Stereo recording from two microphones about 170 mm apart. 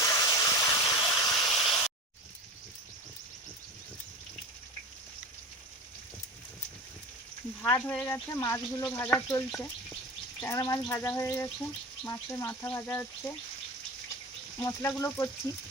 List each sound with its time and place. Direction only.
0.0 s a sound: 20° left (ahead or behind)
1.5 s hiss: centre (ahead or behind)
7.6 s speech: 10° left (ahead or behind)
14.6 s speech: 15° left (ahead or behind)